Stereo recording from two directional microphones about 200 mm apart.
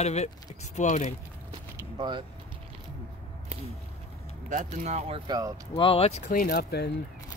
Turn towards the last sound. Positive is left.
turn(degrees=55)  # may be behind; listen again after turning